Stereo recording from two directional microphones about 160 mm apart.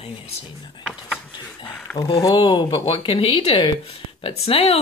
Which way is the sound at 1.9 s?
25° left (ahead or behind).